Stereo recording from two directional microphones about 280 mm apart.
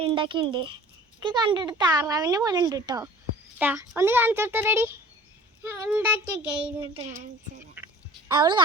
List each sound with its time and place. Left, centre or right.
0.0 s speech: centre
5.6 s child singing: centre
7.8 s a sound: centre
8.4 s speech: centre